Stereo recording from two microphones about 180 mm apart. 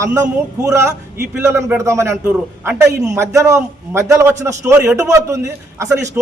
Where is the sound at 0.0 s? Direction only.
15° right (ahead or behind).